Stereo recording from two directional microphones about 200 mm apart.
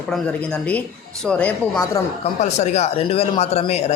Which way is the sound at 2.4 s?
35° left (ahead or behind).